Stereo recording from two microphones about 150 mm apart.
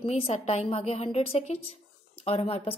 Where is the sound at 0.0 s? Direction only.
40° left (ahead or behind).